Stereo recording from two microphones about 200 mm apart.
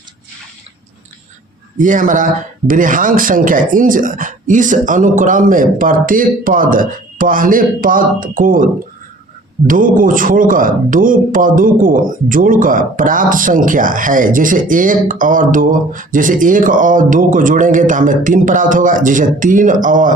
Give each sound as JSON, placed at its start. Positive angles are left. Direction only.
{"t": 1.8, "sound": "speech", "side_deg": -40}